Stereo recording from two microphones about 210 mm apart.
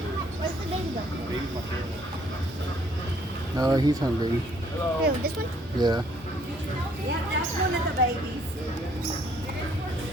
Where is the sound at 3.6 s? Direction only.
20° right (ahead or behind).